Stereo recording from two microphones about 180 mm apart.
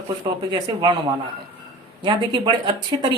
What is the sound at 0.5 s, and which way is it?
Speech, 25° right (ahead or behind).